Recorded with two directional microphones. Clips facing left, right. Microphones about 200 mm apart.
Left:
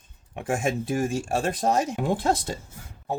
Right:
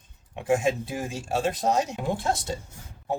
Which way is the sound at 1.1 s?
50° left (ahead or behind).